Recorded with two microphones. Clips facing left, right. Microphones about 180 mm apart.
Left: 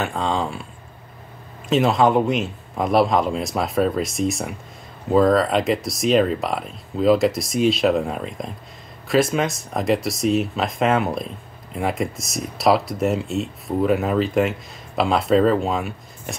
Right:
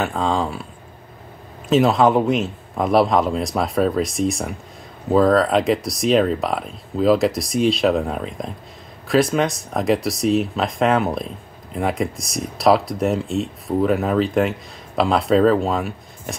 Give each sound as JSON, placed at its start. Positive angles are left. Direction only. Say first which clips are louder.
{"t": 0.0, "sound": "speech", "louder": "right 2 dB", "side_deg": 0}
{"t": 1.7, "sound": "speech", "louder": "right 2 dB", "side_deg": 0}